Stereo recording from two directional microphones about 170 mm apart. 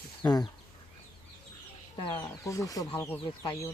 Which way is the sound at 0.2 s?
15° left (ahead or behind).